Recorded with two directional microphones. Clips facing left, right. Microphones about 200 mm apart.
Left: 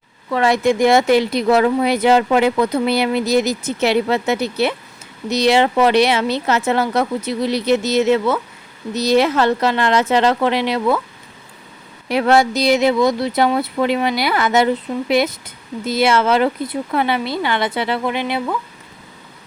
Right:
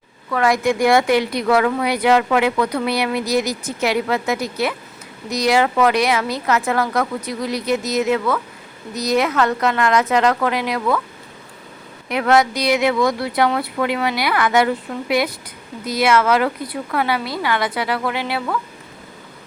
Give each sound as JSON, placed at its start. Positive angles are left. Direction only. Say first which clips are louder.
{"t": 0.3, "sound": "speech", "louder": "left 2 dB", "side_deg": 25}
{"t": 12.0, "sound": "speech", "louder": "left 2 dB", "side_deg": 30}